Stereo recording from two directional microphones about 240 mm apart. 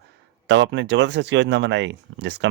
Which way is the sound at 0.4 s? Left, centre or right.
Right.